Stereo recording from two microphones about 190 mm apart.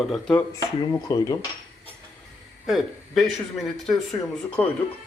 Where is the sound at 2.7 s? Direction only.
Centre (ahead or behind).